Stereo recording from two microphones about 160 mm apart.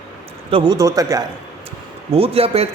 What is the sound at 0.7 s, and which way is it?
Speech, 20° right (ahead or behind).